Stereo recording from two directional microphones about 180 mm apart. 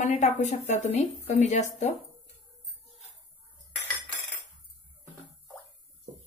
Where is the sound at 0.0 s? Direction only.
40° left (ahead or behind).